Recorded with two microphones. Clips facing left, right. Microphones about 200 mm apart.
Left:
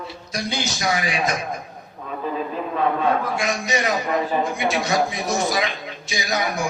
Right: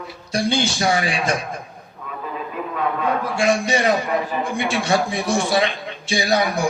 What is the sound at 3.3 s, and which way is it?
A man's voice, 30° right (ahead or behind).